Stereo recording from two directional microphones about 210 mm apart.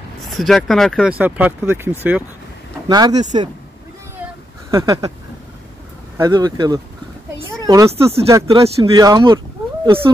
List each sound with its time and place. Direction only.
0.2 s speech: centre (ahead or behind)
2.9 s speech: 20° right (ahead or behind)
4.6 s a sound: 15° right (ahead or behind)
6.1 s speech: 15° right (ahead or behind)
7.9 s speech: 30° right (ahead or behind)
8.3 s speech: 15° right (ahead or behind)